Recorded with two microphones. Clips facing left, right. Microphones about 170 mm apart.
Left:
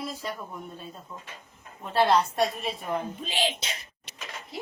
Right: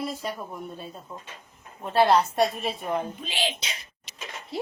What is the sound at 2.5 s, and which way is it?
Speech, centre (ahead or behind).